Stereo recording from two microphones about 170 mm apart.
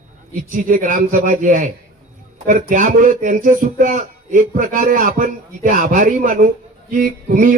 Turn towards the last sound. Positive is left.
turn(degrees=-50)  # may be behind; listen again after turning